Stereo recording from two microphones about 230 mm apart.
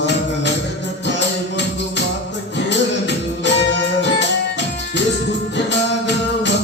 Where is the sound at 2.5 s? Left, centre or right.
Left.